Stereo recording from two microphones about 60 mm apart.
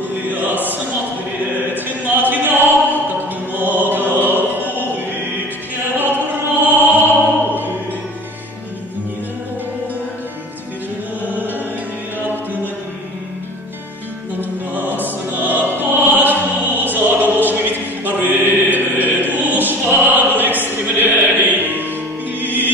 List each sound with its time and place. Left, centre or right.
0.1 s music: right
2.0 s a sound: right
3.5 s mantra: right
5.9 s opera: right
11.2 s music: right
14.4 s music: right
15.8 s opera: right
22.4 s music: right